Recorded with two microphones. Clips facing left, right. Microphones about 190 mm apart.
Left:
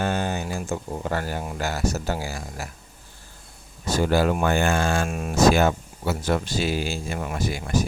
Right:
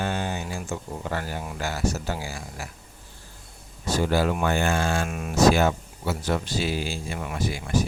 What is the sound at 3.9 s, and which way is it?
Speech, 50° left (ahead or behind).